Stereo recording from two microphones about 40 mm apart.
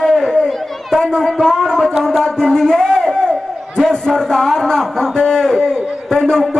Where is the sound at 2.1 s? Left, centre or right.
Centre.